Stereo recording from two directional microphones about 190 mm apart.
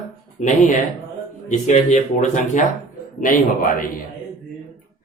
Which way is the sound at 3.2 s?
45° left (ahead or behind).